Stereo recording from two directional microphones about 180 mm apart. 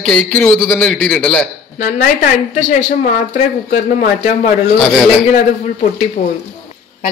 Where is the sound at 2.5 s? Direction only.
45° left (ahead or behind).